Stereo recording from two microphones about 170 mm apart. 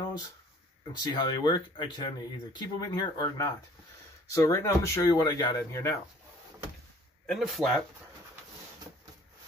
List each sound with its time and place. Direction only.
1.0 s speech: 25° left (ahead or behind)
7.2 s speech: centre (ahead or behind)